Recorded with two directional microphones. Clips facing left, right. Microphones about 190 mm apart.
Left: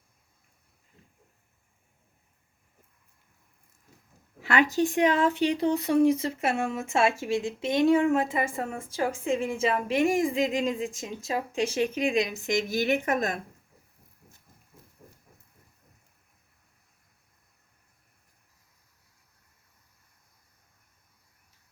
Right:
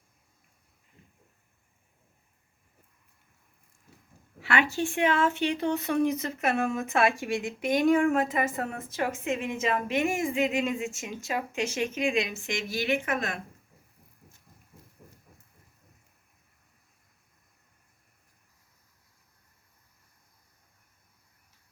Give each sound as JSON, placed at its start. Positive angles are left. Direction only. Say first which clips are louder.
{"t": 4.4, "sound": "speech", "louder": "left 3 dB", "side_deg": 40}